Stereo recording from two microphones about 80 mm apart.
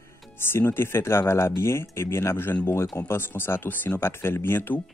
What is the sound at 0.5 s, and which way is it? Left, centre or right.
Speech, left.